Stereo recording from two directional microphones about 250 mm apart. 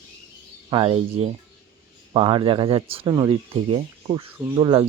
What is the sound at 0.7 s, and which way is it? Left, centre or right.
Speech, right.